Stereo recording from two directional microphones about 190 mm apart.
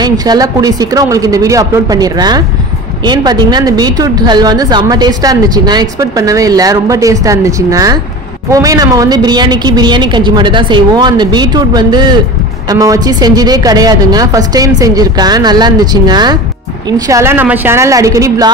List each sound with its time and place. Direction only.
0.0 s a woman's voice: 20° right (ahead or behind)